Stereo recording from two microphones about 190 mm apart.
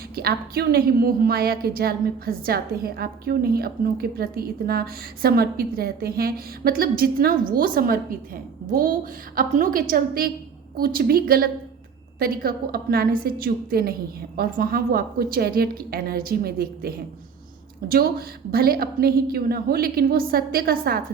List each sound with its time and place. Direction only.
0.2 s a woman's voice: 55° right (ahead or behind)
9.3 s a woman's voice: 45° right (ahead or behind)